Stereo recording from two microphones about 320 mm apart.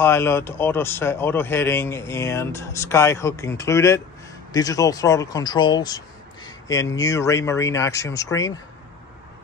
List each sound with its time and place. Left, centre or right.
0.0 s speech: centre